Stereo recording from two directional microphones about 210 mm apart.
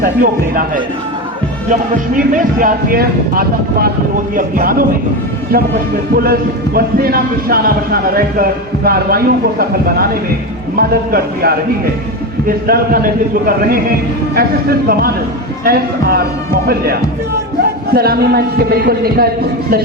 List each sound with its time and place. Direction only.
0.0 s a man's voice: 45° right (ahead or behind)
1.7 s a man's voice: 40° right (ahead or behind)
6.7 s a man's voice: 45° right (ahead or behind)